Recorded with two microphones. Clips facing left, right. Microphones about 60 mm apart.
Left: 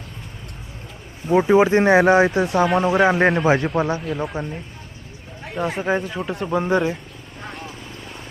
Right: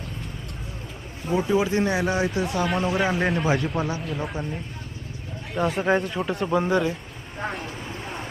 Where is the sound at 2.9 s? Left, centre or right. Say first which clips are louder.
Left 7 dB; centre.